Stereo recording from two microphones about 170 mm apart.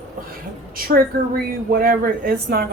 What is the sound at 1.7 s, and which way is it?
Speech, 60° right (ahead or behind).